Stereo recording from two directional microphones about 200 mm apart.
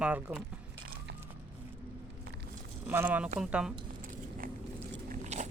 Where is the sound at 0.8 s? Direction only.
50° right (ahead or behind).